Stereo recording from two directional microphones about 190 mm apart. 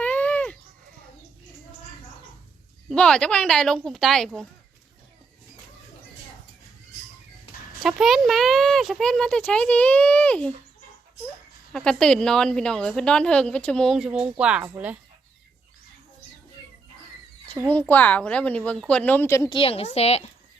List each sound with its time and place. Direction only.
0.0 s a sound: 10° left (ahead or behind)
2.9 s a woman's voice: 5° left (ahead or behind)
7.8 s a woman's voice: centre (ahead or behind)
11.7 s a woman's voice: 5° left (ahead or behind)
17.7 s speech: 10° left (ahead or behind)
19.5 s a woman's voice: 30° left (ahead or behind)